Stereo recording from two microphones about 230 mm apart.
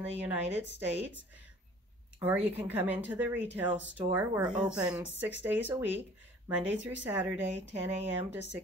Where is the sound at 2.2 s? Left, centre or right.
Centre.